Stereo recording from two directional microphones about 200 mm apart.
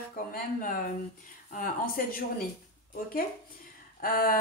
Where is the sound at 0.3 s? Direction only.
45° left (ahead or behind).